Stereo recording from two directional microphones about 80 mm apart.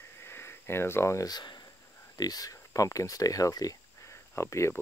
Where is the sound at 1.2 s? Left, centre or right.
Left.